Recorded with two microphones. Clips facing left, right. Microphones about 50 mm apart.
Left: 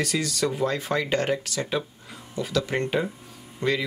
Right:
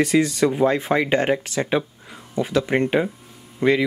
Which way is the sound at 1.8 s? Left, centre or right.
Centre.